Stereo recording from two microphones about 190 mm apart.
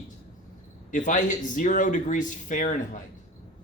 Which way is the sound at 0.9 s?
40° left (ahead or behind).